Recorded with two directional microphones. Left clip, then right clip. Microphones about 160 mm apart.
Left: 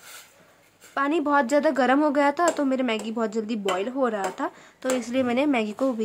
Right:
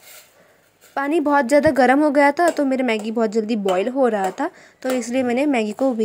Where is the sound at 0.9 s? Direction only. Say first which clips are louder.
Right 4 dB; 20° right (ahead or behind).